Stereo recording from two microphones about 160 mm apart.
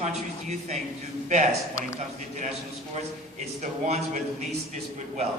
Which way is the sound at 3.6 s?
45° right (ahead or behind).